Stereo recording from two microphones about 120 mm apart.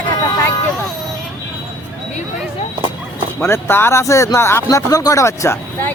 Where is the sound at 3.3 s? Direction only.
20° left (ahead or behind).